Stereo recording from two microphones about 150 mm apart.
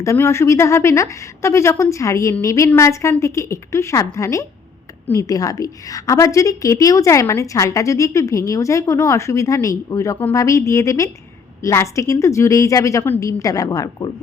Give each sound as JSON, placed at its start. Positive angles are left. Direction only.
{"t": 0.0, "sound": "a woman's voice", "side_deg": 20}